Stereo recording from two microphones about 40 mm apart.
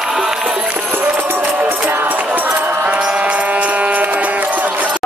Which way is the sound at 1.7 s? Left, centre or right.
Right.